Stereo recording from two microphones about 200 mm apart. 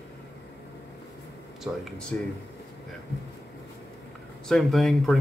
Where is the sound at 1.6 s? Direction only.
Centre (ahead or behind).